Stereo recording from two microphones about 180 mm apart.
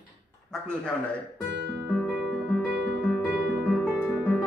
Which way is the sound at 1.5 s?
75° right (ahead or behind).